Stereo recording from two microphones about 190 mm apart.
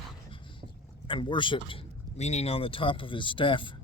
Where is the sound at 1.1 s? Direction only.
25° left (ahead or behind).